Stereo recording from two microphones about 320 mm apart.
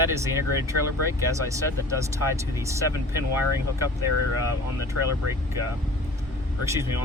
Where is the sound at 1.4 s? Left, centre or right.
Centre.